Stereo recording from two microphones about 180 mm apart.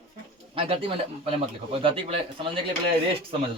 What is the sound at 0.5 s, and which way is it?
Speech, 30° right (ahead or behind).